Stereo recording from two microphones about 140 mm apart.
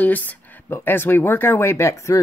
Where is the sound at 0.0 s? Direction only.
10° left (ahead or behind).